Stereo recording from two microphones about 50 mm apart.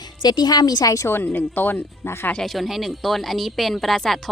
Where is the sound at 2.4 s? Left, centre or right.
Centre.